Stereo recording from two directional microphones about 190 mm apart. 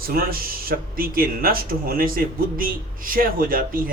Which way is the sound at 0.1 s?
50° right (ahead or behind).